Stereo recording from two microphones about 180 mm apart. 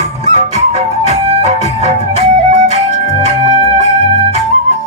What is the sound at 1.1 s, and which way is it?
Music, 35° right (ahead or behind).